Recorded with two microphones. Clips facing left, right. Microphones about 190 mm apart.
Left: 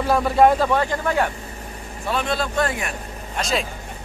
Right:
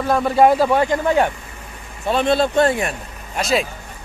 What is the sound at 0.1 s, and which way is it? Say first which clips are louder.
Speech: right 2 dB; centre (ahead or behind).